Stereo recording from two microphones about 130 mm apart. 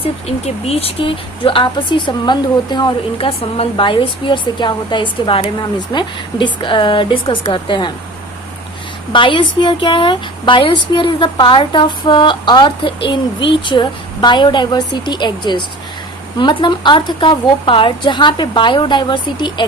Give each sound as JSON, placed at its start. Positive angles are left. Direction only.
{"t": 0.0, "sound": "a woman's voice", "side_deg": 50}
{"t": 9.1, "sound": "a woman's voice", "side_deg": 40}